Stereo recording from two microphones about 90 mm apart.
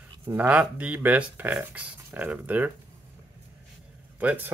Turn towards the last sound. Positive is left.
turn(degrees=-15)  # may be behind; listen again after turning